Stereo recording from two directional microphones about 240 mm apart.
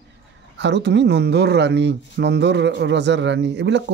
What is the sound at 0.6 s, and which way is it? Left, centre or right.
Speech, right.